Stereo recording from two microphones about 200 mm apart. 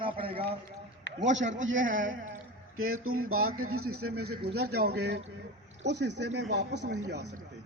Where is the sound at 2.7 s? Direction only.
90° right.